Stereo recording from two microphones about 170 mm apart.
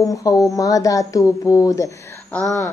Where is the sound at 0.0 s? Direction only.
20° left (ahead or behind).